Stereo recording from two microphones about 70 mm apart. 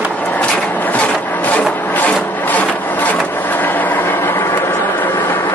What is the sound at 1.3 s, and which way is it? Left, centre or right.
Music, left.